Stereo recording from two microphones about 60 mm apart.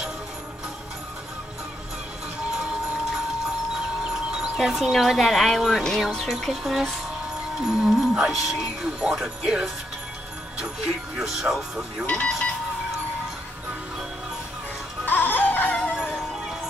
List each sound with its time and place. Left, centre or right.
2.5 s music: centre
4.1 s a sound: centre
4.6 s speech: centre
15.0 s music: left
15.9 s music: centre